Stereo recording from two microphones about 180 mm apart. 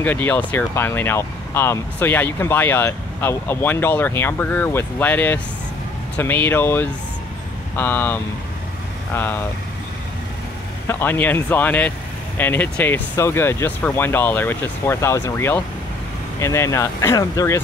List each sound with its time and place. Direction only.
0.0 s speech: 10° left (ahead or behind)
10.9 s speech: 10° left (ahead or behind)